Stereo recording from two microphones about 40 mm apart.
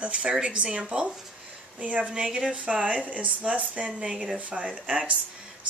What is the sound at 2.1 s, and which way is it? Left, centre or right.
Speech, right.